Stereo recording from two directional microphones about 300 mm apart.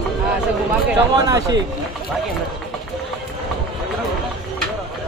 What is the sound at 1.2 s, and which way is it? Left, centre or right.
Speech, centre.